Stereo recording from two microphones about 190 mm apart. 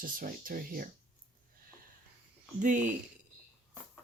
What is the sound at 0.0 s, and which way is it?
Speech, 50° right (ahead or behind).